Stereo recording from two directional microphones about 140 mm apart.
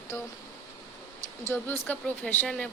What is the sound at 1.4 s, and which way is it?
Speech, 15° left (ahead or behind).